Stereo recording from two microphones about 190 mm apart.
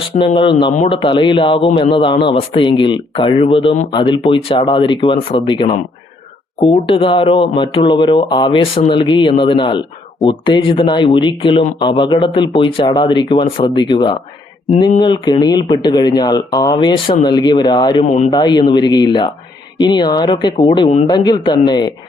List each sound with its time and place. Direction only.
0.3 s speech: 25° left (ahead or behind)